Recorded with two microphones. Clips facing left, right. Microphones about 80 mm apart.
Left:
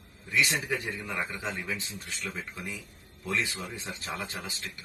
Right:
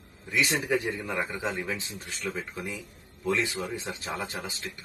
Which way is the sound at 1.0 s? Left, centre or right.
Centre.